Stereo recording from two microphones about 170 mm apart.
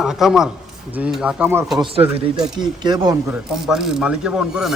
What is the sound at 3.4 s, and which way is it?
Speech, 5° right (ahead or behind).